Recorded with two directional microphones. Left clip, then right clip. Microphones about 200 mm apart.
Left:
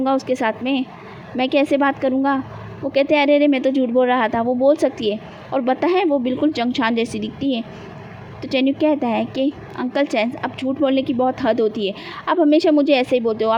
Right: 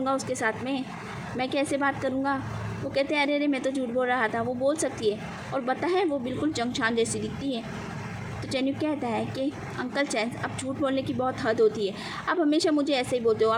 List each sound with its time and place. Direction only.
0.0 s a woman's voice: 30° left (ahead or behind)